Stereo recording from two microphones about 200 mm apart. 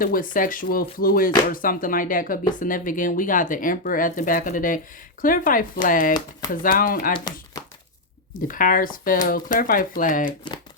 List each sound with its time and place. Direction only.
0.0 s speech: 45° left (ahead or behind)
8.3 s speech: 45° left (ahead or behind)